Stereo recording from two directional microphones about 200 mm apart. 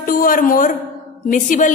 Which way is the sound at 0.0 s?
45° left (ahead or behind).